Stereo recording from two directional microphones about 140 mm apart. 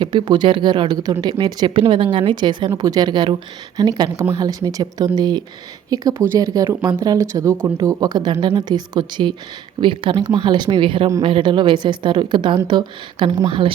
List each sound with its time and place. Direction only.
0.0 s speech: 35° right (ahead or behind)